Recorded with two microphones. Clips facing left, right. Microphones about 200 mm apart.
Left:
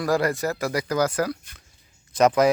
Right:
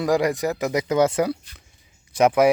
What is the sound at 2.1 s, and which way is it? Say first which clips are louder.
Speech: right 1 dB; 10° right (ahead or behind).